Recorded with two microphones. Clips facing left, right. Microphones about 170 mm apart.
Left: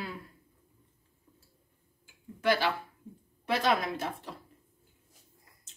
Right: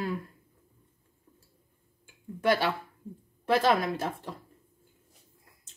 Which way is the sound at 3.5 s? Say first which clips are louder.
Right 4 dB; 50° right (ahead or behind).